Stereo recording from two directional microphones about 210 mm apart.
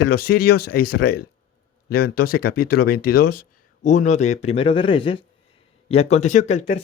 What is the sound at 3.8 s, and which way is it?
Speech, 35° left (ahead or behind).